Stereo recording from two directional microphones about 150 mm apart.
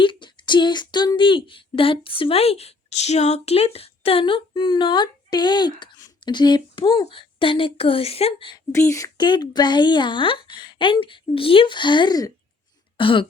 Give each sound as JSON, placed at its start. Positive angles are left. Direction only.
{"t": 0.0, "sound": "speech", "side_deg": 35}
{"t": 8.7, "sound": "speech", "side_deg": 20}